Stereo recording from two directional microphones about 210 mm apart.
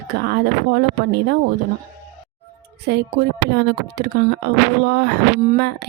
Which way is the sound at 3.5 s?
55° right (ahead or behind).